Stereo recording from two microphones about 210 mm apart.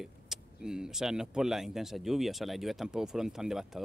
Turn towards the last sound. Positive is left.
turn(degrees=0)  # may be behind; listen again after turning